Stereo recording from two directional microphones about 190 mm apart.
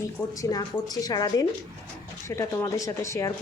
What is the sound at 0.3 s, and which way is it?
A woman's voice, 20° left (ahead or behind).